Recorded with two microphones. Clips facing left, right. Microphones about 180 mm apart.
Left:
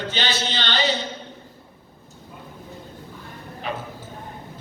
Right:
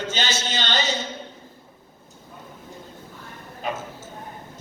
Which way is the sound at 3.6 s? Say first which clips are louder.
Right 1 dB; 45° right (ahead or behind).